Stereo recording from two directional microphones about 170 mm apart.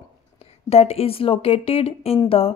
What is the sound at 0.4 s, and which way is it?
A woman's voice, 35° left (ahead or behind).